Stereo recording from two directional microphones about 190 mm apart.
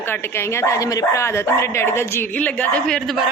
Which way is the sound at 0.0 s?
10° left (ahead or behind).